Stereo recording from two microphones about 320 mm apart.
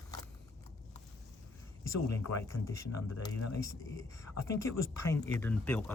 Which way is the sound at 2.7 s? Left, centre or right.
Centre.